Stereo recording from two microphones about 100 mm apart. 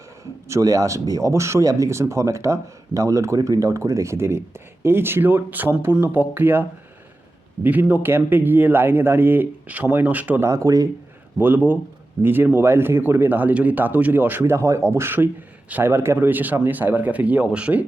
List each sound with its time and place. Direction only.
0.4 s speech: 30° right (ahead or behind)
10.5 s speech: 35° right (ahead or behind)
11.3 s speech: 20° right (ahead or behind)